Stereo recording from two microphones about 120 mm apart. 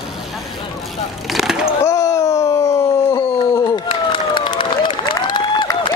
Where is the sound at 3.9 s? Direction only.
40° left (ahead or behind).